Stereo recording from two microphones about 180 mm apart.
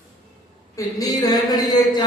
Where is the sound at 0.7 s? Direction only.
20° left (ahead or behind).